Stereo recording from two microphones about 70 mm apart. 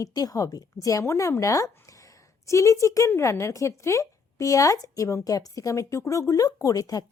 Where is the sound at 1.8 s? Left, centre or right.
Left.